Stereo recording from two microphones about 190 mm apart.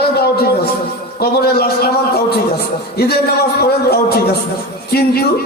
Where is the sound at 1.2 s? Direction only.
55° left (ahead or behind).